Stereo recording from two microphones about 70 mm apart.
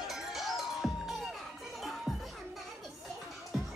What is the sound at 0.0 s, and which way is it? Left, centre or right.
Music, centre.